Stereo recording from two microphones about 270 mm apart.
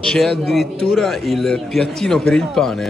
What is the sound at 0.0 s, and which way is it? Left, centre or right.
A man's voice, centre.